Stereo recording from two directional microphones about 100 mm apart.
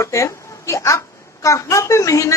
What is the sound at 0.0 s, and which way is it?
A woman's voice, 30° left (ahead or behind).